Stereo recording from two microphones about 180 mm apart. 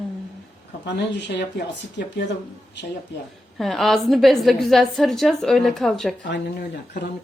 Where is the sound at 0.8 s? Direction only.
70° left (ahead or behind).